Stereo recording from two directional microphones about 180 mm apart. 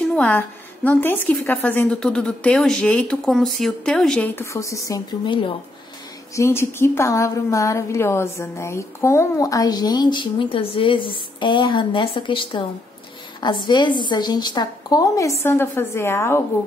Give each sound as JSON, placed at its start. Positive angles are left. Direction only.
{"t": 0.1, "sound": "a woman's voice", "side_deg": 10}
{"t": 6.3, "sound": "a woman's voice", "side_deg": 15}